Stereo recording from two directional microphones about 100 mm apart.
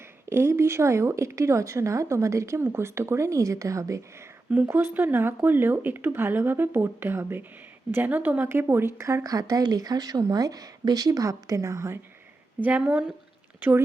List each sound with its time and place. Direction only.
0.3 s a woman's voice: 25° right (ahead or behind)
12.6 s a woman's voice: 15° right (ahead or behind)